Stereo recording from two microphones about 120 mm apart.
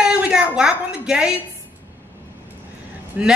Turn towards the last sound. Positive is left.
turn(degrees=-10)  # may be behind; listen again after turning